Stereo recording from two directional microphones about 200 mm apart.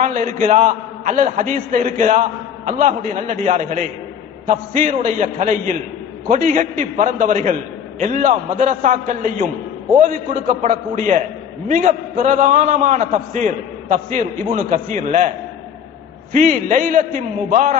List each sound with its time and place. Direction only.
0.0 s a man's voice: 40° right (ahead or behind)
16.3 s a man's voice: 40° right (ahead or behind)